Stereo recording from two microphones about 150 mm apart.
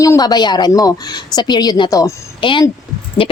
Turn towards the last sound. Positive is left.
turn(degrees=35)  # may be behind; listen again after turning